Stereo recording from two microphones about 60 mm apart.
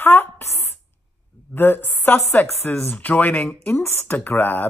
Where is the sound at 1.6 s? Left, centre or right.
Left.